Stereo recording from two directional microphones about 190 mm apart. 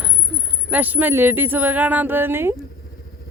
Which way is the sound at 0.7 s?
10° right (ahead or behind).